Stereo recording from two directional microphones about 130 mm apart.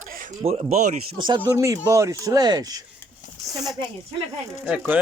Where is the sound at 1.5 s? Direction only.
20° right (ahead or behind).